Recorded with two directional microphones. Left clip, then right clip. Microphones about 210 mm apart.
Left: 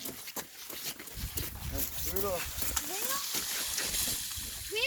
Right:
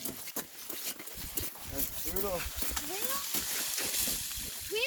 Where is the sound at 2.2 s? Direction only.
20° left (ahead or behind).